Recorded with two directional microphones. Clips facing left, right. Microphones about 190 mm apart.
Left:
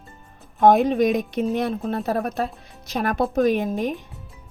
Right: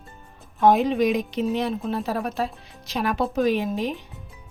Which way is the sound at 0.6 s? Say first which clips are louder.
Left 2 dB; 50° left (ahead or behind).